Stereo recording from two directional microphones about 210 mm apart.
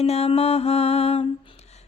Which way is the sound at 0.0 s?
30° left (ahead or behind).